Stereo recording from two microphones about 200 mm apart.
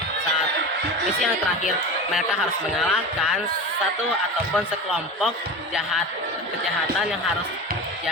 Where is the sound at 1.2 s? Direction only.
Centre (ahead or behind).